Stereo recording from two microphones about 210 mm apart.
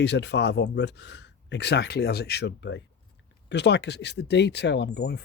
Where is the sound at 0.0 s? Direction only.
55° left (ahead or behind).